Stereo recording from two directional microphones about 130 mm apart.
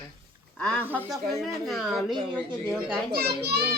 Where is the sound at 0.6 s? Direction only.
5° left (ahead or behind).